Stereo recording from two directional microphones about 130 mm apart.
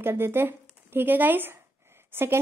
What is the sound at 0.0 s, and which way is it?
A woman's voice, 20° right (ahead or behind).